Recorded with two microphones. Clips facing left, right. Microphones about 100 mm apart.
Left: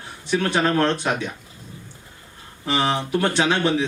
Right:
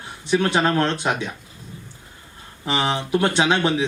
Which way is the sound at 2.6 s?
20° right (ahead or behind).